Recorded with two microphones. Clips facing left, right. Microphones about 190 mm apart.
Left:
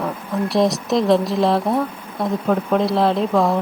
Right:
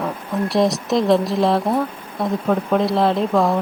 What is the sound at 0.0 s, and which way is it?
Speech, centre (ahead or behind).